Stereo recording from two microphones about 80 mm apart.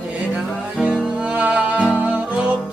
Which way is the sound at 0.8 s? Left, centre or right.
Centre.